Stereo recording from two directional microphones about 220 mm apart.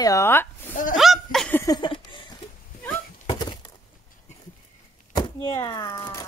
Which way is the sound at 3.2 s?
20° left (ahead or behind).